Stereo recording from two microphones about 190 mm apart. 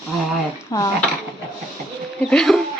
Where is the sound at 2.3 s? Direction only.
5° left (ahead or behind).